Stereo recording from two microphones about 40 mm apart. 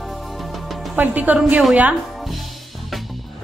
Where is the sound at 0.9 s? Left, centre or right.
Right.